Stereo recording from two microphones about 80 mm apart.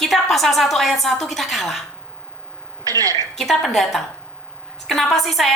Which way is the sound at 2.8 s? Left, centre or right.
Right.